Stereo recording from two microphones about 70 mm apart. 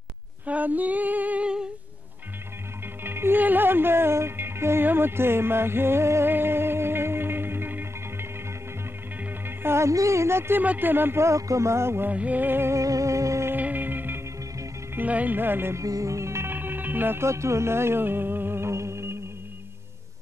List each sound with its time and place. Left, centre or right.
0.5 s female singing: right
3.0 s music: right
9.6 s speech: right
10.6 s speech: right
12.1 s speech: right
12.7 s music: right
13.5 s music: right
15.0 s speech: right
15.8 s music: right